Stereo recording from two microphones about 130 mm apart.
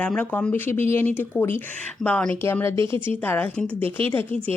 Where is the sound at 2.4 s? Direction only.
20° left (ahead or behind).